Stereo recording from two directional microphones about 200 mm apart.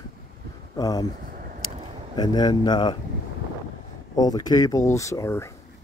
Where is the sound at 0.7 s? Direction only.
20° left (ahead or behind).